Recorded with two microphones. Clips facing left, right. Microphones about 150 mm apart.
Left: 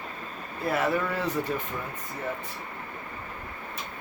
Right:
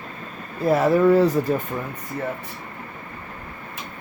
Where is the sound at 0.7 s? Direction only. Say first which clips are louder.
Right 11 dB; 40° right (ahead or behind).